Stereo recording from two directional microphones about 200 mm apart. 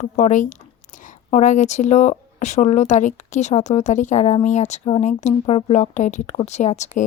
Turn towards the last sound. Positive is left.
turn(degrees=35)  # may be behind; listen again after turning